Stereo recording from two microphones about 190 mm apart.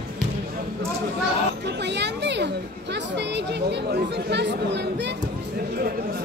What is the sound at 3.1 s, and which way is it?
Chatter, 65° right (ahead or behind).